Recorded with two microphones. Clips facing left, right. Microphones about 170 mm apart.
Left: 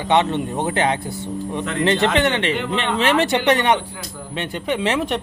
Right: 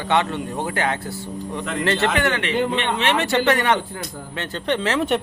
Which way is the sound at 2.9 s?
35° left (ahead or behind).